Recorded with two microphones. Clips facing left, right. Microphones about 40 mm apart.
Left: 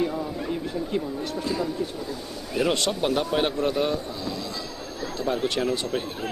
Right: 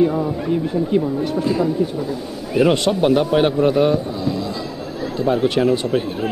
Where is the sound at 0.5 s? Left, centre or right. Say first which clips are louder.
Right 11 dB; centre.